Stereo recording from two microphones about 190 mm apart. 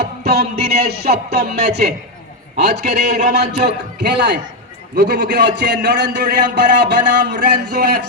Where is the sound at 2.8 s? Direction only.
40° right (ahead or behind).